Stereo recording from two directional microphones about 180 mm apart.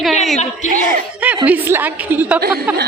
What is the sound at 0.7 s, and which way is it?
Speech, 50° right (ahead or behind).